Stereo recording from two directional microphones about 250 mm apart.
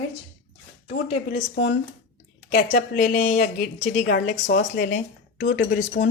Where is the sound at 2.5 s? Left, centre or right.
Left.